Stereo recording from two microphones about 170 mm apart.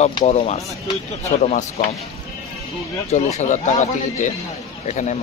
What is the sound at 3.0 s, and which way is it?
Speech, 40° left (ahead or behind).